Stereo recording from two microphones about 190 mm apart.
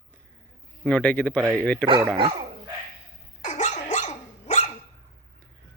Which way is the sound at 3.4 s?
40° left (ahead or behind).